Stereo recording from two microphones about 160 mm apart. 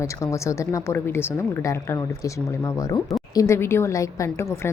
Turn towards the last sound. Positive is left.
turn(degrees=15)  # may be behind; listen again after turning